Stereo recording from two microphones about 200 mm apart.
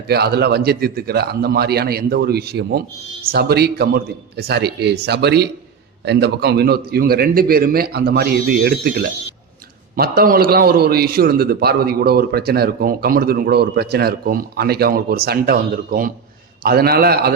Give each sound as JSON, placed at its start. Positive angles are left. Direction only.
{"t": 0.1, "sound": "a man's voice", "side_deg": -55}